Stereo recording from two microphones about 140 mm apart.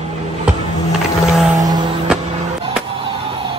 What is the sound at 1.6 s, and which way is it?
Music, 30° right (ahead or behind).